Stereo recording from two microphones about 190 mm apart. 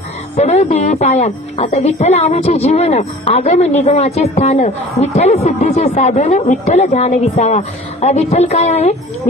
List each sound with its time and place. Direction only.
0.4 s a woman's voice: 35° left (ahead or behind)